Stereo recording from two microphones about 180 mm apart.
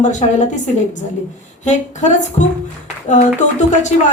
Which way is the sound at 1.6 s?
40° left (ahead or behind).